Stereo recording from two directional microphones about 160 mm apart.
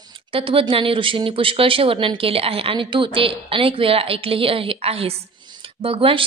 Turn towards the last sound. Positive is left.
turn(degrees=-35)  # may be behind; listen again after turning